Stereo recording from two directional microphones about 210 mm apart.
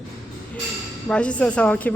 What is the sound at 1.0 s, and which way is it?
Speech, 5° left (ahead or behind).